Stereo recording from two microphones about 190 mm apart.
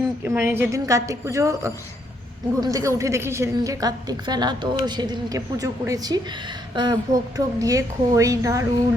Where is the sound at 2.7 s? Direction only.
15° right (ahead or behind).